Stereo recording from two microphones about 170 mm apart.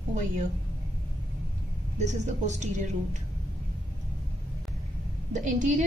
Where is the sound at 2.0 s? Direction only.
45° right (ahead or behind).